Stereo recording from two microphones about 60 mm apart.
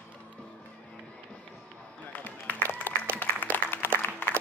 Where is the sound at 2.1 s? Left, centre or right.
Left.